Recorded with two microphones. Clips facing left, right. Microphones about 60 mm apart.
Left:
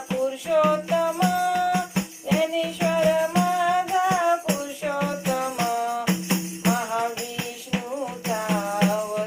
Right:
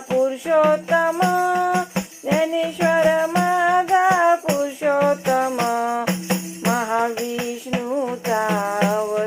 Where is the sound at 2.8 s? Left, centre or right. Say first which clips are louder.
Right 4 dB; right.